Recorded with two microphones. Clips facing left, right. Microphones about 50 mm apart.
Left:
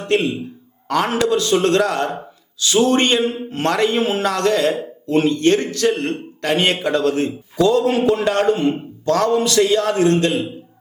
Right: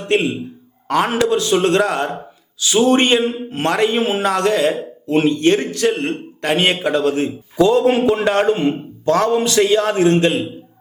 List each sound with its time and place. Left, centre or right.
0.1 s a man's voice: centre
7.5 s a man's voice: right